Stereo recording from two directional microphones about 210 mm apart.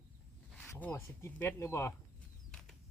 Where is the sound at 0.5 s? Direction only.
5° left (ahead or behind).